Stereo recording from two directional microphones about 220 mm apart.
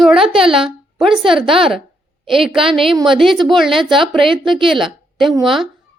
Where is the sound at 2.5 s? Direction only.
Centre (ahead or behind).